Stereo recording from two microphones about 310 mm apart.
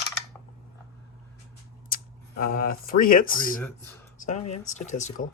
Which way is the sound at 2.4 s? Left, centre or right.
Left.